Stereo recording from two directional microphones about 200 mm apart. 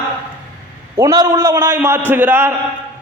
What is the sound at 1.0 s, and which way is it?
A man's voice, 15° right (ahead or behind).